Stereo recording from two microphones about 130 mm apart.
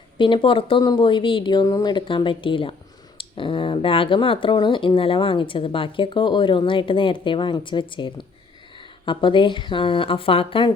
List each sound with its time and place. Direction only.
0.2 s speech: 40° left (ahead or behind)